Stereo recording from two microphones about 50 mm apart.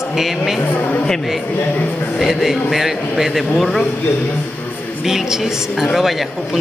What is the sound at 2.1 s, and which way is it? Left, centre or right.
Speech, centre.